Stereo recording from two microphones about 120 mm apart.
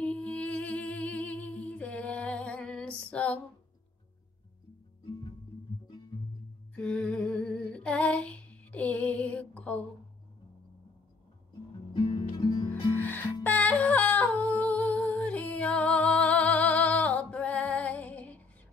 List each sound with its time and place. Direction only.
0.0 s music: 10° left (ahead or behind)
6.7 s humming: 10° left (ahead or behind)
11.9 s music: 35° left (ahead or behind)
12.9 s music: 15° left (ahead or behind)